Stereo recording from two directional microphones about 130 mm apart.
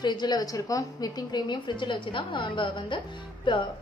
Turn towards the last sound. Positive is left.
turn(degrees=40)  # may be behind; listen again after turning